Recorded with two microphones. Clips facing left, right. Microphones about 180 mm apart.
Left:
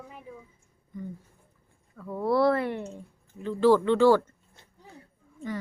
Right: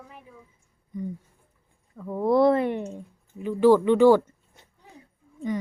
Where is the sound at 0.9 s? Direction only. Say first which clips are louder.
Right 5 dB; 20° right (ahead or behind).